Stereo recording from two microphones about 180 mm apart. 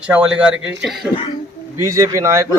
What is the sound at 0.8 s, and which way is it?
Speech, centre (ahead or behind).